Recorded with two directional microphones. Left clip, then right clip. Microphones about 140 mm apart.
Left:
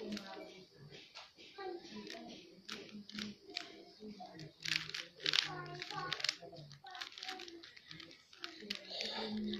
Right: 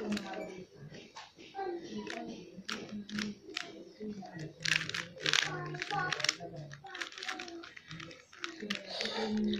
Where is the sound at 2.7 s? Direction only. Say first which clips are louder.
Right 8 dB; 35° right (ahead or behind).